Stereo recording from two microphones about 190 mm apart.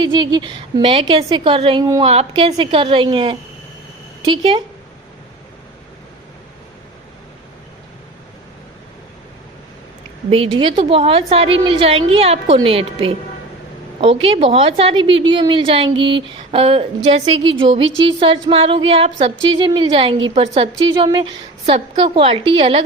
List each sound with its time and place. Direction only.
0.0 s a woman's voice: 25° right (ahead or behind)
10.2 s a woman's voice: 30° right (ahead or behind)